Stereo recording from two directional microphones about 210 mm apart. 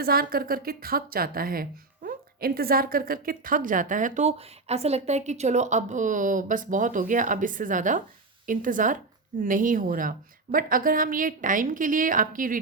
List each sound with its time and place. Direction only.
0.0 s a woman's voice: 45° right (ahead or behind)